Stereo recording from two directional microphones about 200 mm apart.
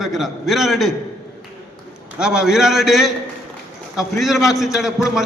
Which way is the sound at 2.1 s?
5° right (ahead or behind).